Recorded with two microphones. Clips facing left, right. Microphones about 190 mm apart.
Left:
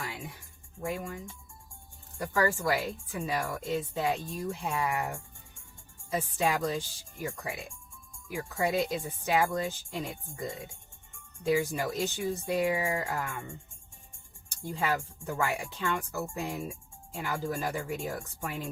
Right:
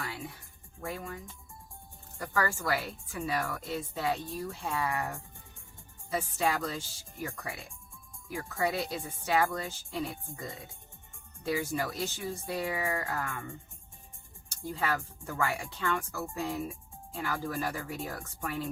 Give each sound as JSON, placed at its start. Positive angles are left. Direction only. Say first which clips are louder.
{"t": 0.0, "sound": "speech", "louder": "even", "side_deg": 20}
{"t": 14.7, "sound": "speech", "louder": "left 2 dB", "side_deg": 20}